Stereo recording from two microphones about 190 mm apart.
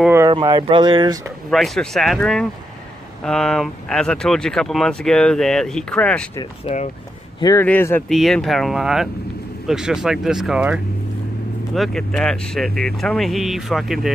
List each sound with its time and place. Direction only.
0.3 s speech: 25° right (ahead or behind)
1.5 s speech: centre (ahead or behind)
6.6 s speech: 35° left (ahead or behind)
7.3 s speech: 20° left (ahead or behind)
7.6 s speech: 10° left (ahead or behind)